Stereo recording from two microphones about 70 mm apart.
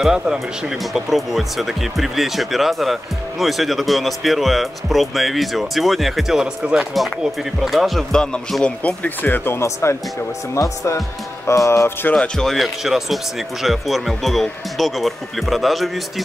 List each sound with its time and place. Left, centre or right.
0.0 s speech: centre
6.8 s speech: centre
8.8 s speech: left
12.2 s speech: centre